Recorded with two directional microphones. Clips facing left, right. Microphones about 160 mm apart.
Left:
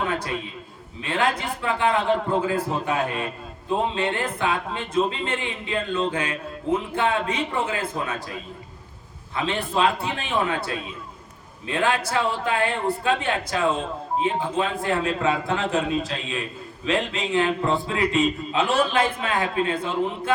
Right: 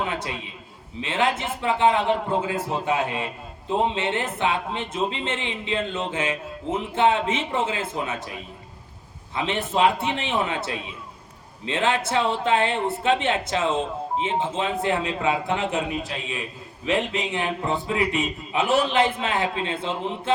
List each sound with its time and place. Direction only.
0.1 s a sound: 20° right (ahead or behind)
1.0 s speech: 20° right (ahead or behind)
9.3 s speech: 20° right (ahead or behind)